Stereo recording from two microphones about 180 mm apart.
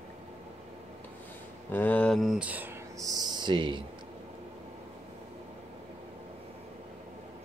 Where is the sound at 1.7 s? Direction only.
10° left (ahead or behind); by 2.7 s 10° right (ahead or behind).